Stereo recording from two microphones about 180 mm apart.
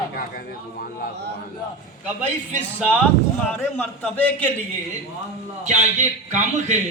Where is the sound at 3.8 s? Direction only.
10° left (ahead or behind).